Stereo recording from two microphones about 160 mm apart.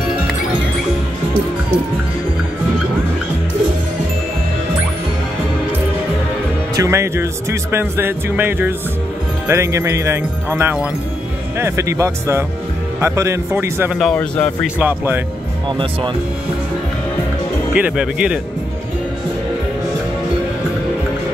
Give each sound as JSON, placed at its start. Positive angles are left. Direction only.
{"t": 6.7, "sound": "speech", "side_deg": -20}
{"t": 13.9, "sound": "speech", "side_deg": 5}
{"t": 14.8, "sound": "speech", "side_deg": -15}
{"t": 17.7, "sound": "speech", "side_deg": -5}